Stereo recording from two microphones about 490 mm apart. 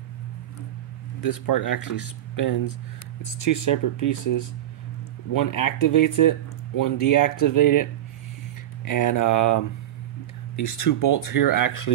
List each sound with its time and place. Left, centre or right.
1.2 s speech: left